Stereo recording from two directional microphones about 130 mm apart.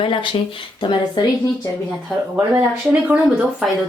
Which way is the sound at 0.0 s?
40° left (ahead or behind).